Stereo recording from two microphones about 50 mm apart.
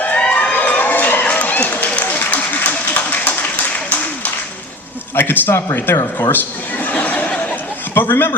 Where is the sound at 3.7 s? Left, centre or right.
Left.